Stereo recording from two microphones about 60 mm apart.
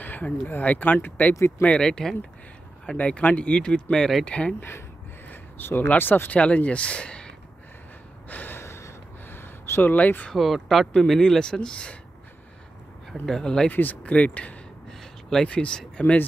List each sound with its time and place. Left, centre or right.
0.0 s speech: left
1.6 s speech: centre
4.6 s speech: left
5.3 s a sound: left
5.9 s speech: left; by 7.3 s centre
8.3 s gasp: left
8.5 s a sound: left
10.3 s speech: centre
13.1 s speech: centre
13.7 s speech: left
14.9 s a sound: centre
15.4 s speech: centre